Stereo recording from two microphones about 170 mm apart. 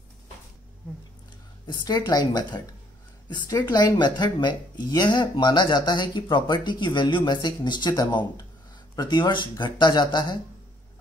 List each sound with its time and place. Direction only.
1.9 s speech: 25° left (ahead or behind)